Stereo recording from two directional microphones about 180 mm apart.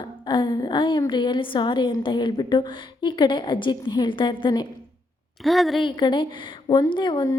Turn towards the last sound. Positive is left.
turn(degrees=25)  # may be behind; listen again after turning